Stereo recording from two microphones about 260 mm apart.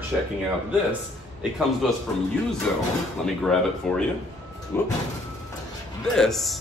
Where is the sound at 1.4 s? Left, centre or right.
Centre.